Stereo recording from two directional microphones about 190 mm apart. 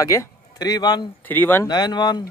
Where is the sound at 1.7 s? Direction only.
20° left (ahead or behind).